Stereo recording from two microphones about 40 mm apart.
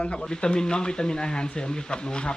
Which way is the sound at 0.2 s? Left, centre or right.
Centre.